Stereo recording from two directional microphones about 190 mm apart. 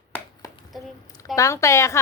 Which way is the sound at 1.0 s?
20° left (ahead or behind).